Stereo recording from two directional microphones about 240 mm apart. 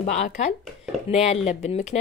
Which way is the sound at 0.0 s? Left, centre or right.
Left.